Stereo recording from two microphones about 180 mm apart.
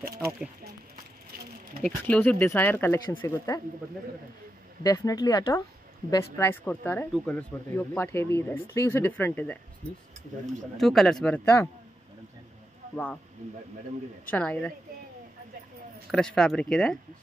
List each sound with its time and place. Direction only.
1.8 s speech: 10° left (ahead or behind)
4.8 s speech: 20° left (ahead or behind)
10.8 s speech: centre (ahead or behind)
12.9 s speech: 5° left (ahead or behind)
14.3 s speech: 5° left (ahead or behind)
16.1 s speech: 5° left (ahead or behind)